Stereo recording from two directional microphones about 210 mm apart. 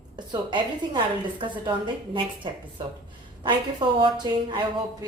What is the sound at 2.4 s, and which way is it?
Speech, 25° right (ahead or behind).